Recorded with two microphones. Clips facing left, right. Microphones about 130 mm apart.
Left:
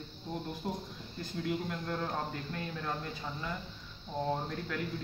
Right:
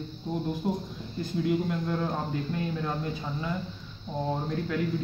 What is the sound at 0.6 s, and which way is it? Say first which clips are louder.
Speech: right 8 dB; 20° right (ahead or behind).